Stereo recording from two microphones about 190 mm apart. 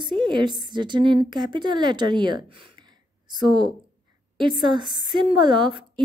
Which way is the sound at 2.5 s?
25° right (ahead or behind).